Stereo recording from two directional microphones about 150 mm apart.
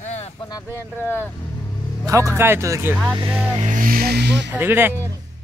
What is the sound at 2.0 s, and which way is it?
Speech, 20° right (ahead or behind).